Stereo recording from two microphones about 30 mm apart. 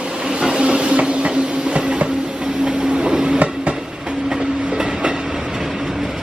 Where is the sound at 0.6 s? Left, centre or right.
Right.